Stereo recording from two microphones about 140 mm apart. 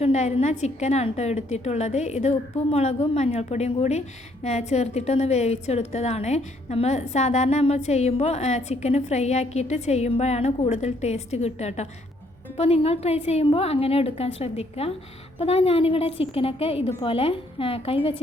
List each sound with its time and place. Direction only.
0.0 s a woman's voice: 50° left (ahead or behind)